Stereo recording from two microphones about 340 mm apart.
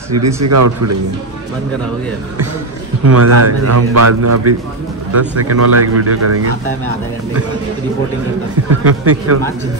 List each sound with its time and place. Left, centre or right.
0.1 s speech: right
3.2 s speech: right
8.6 s speech: right